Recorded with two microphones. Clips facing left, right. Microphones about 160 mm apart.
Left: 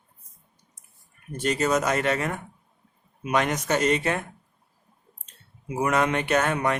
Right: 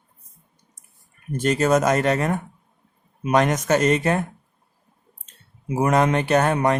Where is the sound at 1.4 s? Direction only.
45° right (ahead or behind).